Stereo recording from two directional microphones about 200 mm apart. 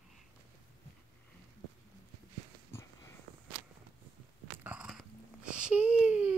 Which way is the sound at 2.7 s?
15° left (ahead or behind).